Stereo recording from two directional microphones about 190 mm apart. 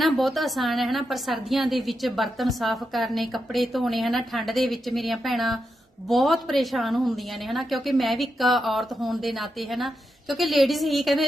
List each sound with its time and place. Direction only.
0.0 s a woman's voice: centre (ahead or behind)